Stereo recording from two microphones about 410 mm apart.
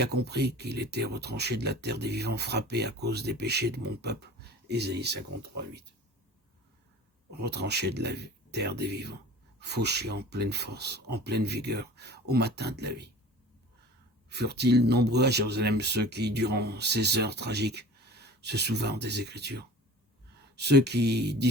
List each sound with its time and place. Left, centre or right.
0.0 s speech: right
7.3 s speech: right
14.3 s speech: right